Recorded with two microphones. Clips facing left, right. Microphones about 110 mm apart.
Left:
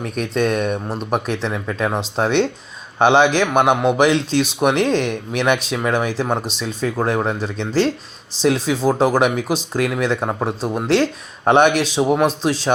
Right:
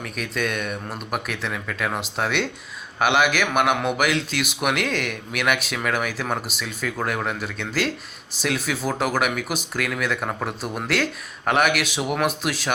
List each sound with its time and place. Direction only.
0.0 s speech: 30° left (ahead or behind)